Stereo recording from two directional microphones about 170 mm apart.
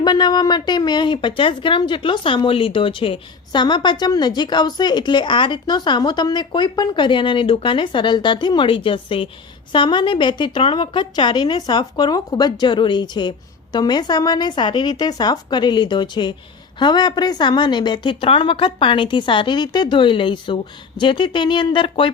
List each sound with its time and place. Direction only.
0.0 s a woman's voice: 25° left (ahead or behind)